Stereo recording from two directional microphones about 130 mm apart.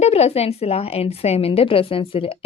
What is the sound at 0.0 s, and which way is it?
A woman's voice, 55° left (ahead or behind).